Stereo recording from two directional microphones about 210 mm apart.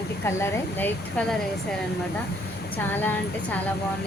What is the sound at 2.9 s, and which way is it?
Speech, 10° left (ahead or behind).